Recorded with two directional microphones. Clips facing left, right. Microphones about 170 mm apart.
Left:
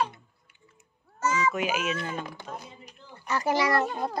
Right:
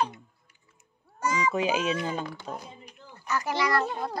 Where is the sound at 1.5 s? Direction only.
30° right (ahead or behind).